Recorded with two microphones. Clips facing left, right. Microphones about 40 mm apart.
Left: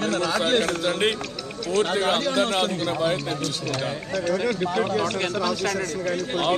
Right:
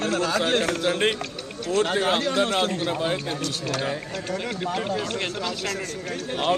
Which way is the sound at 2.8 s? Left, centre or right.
Centre.